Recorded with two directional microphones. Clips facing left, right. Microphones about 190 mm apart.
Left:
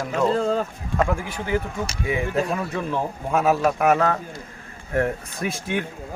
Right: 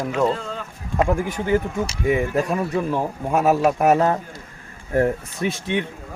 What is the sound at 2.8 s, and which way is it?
Speech, 5° right (ahead or behind).